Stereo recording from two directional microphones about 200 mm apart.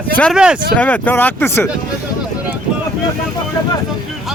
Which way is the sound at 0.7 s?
10° left (ahead or behind).